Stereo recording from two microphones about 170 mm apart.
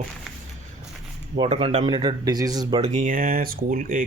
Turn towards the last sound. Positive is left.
turn(degrees=-55)  # may be behind; listen again after turning